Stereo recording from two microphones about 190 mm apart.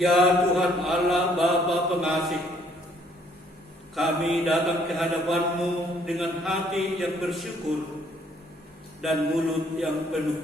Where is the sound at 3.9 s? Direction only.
Centre (ahead or behind).